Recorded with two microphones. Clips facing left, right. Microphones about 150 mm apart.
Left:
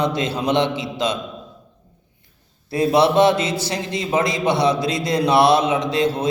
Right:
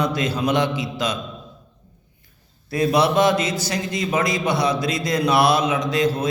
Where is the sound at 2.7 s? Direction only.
30° left (ahead or behind).